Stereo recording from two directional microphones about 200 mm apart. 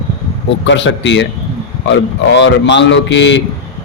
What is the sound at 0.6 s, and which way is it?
Speech, 65° left (ahead or behind).